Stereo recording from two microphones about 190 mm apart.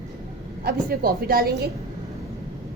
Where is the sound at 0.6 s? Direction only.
50° right (ahead or behind).